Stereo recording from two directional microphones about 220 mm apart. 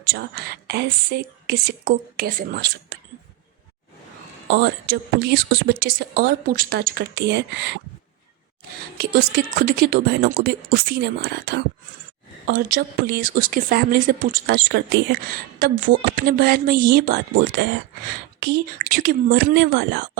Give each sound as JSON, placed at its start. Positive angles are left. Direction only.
{"t": 0.1, "sound": "a woman's voice", "side_deg": -45}
{"t": 4.4, "sound": "a woman's voice", "side_deg": -45}
{"t": 9.0, "sound": "a woman's voice", "side_deg": -40}